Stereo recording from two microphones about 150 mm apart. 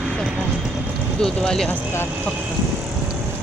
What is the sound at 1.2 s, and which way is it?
Speech, 5° left (ahead or behind).